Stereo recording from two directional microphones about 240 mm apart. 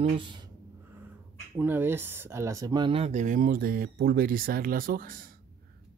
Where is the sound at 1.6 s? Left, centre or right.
Centre.